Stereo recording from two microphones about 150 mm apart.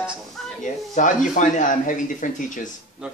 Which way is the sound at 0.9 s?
60° left (ahead or behind).